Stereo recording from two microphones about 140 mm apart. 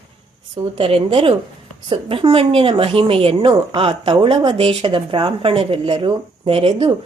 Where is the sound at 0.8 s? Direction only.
40° right (ahead or behind).